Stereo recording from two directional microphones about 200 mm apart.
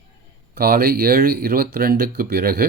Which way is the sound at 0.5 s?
50° right (ahead or behind).